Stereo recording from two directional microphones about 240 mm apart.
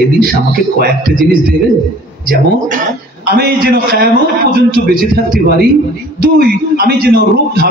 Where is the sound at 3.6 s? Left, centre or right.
Right.